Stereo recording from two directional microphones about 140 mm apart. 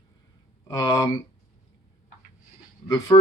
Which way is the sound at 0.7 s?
25° left (ahead or behind).